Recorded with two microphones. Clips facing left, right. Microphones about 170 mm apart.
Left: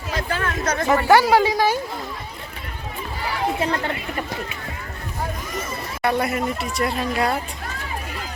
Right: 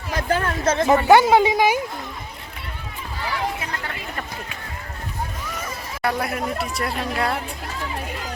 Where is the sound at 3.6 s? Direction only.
30° left (ahead or behind).